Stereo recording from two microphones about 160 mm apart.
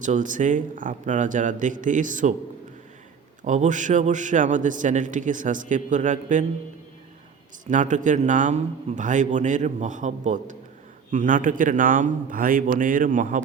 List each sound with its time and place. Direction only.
0.0 s a man's voice: 55° right (ahead or behind)
3.4 s a man's voice: 50° right (ahead or behind)
7.7 s a man's voice: 50° right (ahead or behind)